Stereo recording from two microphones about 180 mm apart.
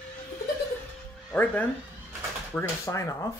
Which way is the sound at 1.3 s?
10° left (ahead or behind).